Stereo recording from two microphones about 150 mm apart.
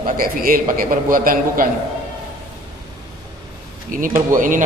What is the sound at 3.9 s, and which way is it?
Speech, 65° right (ahead or behind).